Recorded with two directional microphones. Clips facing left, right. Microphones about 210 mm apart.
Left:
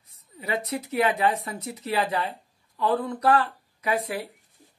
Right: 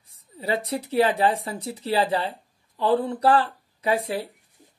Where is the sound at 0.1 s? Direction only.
30° right (ahead or behind).